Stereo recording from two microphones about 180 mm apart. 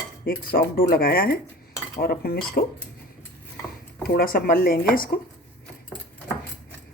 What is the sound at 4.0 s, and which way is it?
Speech, 55° left (ahead or behind).